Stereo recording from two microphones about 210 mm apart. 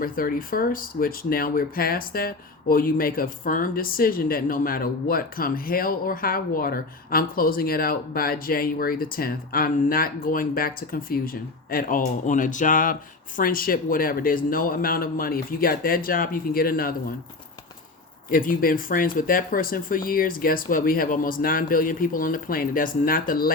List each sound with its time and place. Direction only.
0.0 s speech: 45° left (ahead or behind)
18.3 s speech: 40° left (ahead or behind)